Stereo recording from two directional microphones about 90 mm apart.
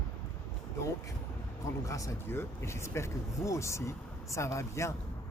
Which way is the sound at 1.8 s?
35° left (ahead or behind).